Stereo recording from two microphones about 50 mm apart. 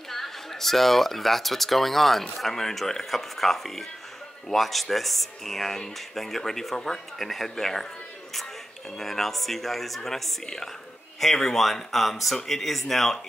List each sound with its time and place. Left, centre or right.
0.1 s speech: centre
8.9 s speech: centre